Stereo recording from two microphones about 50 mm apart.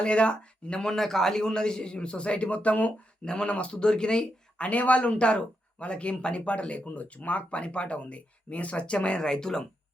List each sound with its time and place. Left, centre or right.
0.0 s speech: left